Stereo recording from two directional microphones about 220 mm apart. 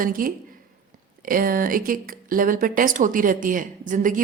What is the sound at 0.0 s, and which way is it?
Speech, 40° right (ahead or behind).